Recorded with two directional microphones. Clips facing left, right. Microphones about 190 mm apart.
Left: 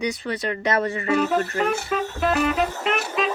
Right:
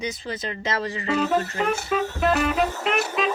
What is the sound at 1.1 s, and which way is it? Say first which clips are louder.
Music: even; 10° left (ahead or behind).